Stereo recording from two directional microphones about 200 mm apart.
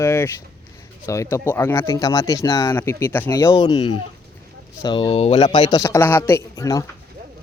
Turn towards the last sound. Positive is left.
turn(degrees=15)  # may be behind; listen again after turning